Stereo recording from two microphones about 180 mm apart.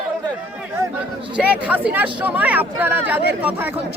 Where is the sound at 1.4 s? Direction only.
5° right (ahead or behind).